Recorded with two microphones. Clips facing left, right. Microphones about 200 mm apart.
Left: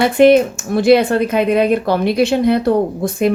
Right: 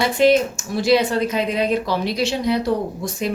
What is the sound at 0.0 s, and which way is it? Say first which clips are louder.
Speech: left 6 dB; 55° left (ahead or behind).